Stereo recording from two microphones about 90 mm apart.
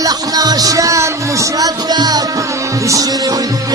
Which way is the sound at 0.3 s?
45° right (ahead or behind).